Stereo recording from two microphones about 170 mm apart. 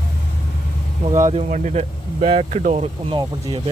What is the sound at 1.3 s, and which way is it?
Speech, 40° right (ahead or behind).